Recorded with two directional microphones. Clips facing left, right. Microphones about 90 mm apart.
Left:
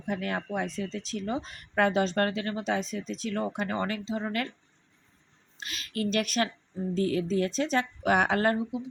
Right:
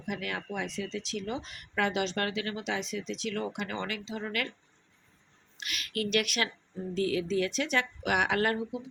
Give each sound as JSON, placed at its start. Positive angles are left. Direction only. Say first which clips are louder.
{"t": 0.0, "sound": "speech", "louder": "left 4 dB", "side_deg": 40}
{"t": 5.5, "sound": "speech", "louder": "left 1 dB", "side_deg": 30}